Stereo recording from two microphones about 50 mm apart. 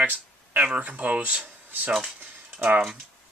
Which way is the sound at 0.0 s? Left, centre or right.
Right.